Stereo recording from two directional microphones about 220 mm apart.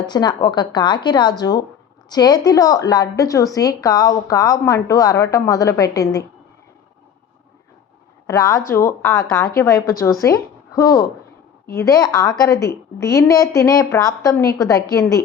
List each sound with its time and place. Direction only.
0.0 s a woman's voice: 20° left (ahead or behind)
8.3 s a woman's voice: 15° left (ahead or behind)